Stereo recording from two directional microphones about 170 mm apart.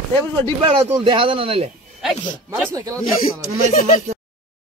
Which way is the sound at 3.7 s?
40° left (ahead or behind).